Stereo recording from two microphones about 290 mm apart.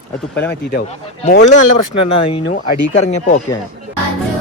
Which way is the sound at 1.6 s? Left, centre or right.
Left.